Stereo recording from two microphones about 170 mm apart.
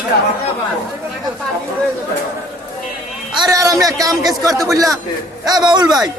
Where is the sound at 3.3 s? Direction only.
25° right (ahead or behind).